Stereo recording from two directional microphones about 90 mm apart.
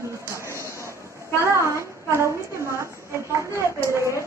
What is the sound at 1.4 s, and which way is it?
Speech, 30° right (ahead or behind).